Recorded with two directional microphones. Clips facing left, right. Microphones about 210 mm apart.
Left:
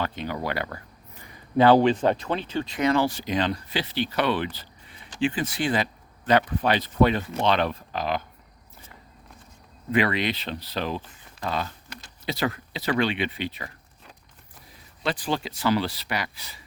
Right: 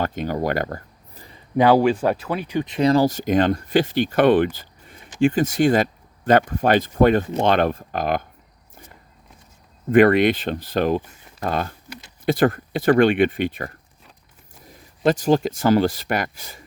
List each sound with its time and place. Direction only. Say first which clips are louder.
0.0 s speech: right 6 dB; 45° right (ahead or behind)
1.5 s speech: right 2 dB; 10° right (ahead or behind)
2.8 s speech: right 6 dB; 35° right (ahead or behind)
9.9 s speech: right 10 dB; 50° right (ahead or behind)
15.0 s speech: right 10 dB; 45° right (ahead or behind)